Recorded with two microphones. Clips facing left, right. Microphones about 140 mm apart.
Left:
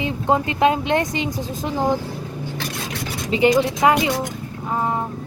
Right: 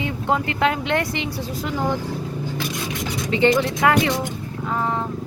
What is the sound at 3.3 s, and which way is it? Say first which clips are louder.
Speech: left 2 dB; 15° left (ahead or behind).